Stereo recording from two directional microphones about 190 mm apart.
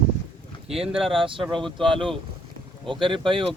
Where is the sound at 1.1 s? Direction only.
25° right (ahead or behind).